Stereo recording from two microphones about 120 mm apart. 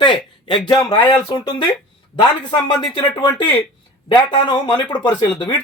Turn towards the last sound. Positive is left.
turn(degrees=40)  # may be behind; listen again after turning